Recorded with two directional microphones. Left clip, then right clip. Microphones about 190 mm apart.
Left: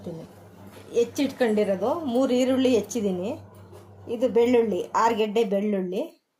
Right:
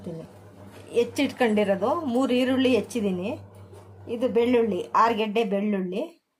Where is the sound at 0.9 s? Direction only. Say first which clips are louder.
Even; 25° right (ahead or behind).